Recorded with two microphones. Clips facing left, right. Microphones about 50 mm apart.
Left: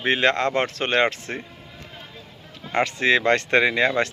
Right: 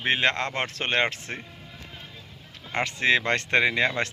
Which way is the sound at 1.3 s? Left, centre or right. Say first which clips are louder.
Left 4 dB; centre.